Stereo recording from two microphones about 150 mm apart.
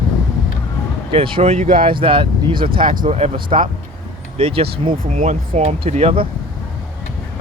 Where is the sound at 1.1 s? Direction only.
35° right (ahead or behind).